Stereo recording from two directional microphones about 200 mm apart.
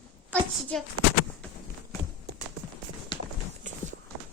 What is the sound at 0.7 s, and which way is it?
Speech, 5° left (ahead or behind).